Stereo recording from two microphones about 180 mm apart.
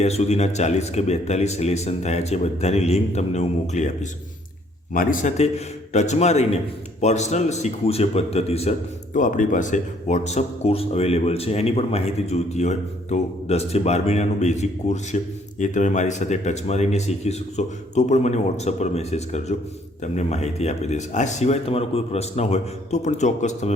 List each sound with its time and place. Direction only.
0.0 s speech: 35° left (ahead or behind)
4.9 s speech: 40° left (ahead or behind)
9.1 s speech: 45° left (ahead or behind)